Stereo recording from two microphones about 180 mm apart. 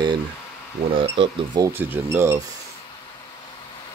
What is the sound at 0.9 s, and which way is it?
Speech, 30° right (ahead or behind).